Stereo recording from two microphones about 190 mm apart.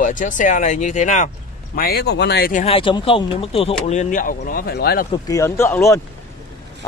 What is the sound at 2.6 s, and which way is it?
Speech, 25° left (ahead or behind).